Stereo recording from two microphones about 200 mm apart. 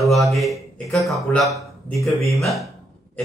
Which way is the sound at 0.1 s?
Centre (ahead or behind).